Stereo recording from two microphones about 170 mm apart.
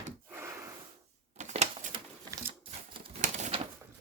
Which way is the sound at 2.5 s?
30° right (ahead or behind).